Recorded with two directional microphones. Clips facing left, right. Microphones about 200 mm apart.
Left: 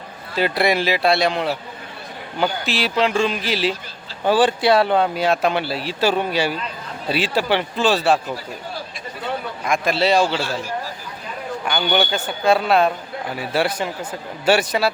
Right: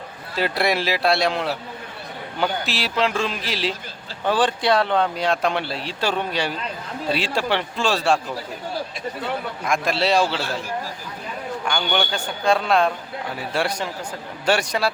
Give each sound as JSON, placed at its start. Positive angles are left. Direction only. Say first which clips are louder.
{"t": 0.3, "sound": "a man's voice", "louder": "left 3 dB", "side_deg": 0}
{"t": 9.6, "sound": "a man's voice", "louder": "left 3 dB", "side_deg": 0}
{"t": 11.6, "sound": "a man's voice", "louder": "left 4 dB", "side_deg": 5}